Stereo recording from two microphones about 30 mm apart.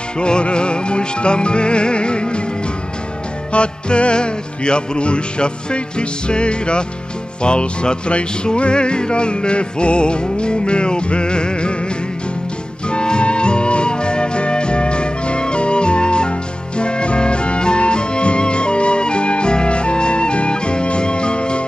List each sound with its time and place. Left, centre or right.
0.2 s music: left
3.5 s music: left
12.9 s music: left